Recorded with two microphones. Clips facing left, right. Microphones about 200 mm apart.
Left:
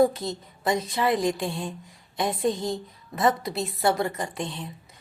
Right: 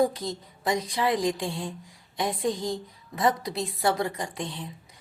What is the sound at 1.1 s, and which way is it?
Speech, 65° left (ahead or behind).